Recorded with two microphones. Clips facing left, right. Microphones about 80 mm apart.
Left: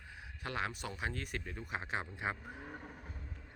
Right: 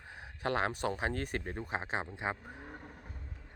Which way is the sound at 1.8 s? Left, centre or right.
Right.